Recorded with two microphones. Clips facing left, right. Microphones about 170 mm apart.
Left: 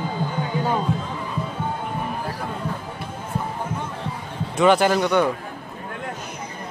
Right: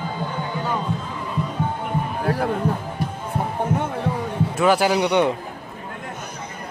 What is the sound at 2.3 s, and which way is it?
Music, 65° right (ahead or behind).